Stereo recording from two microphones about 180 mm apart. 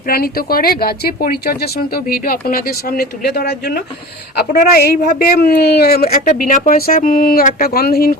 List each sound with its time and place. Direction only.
0.0 s speech: 55° left (ahead or behind)
6.1 s speech: 45° left (ahead or behind)